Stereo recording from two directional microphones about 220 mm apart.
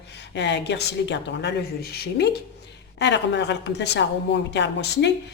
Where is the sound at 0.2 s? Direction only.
55° left (ahead or behind).